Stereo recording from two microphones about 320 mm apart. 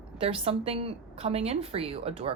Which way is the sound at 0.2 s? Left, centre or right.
Centre.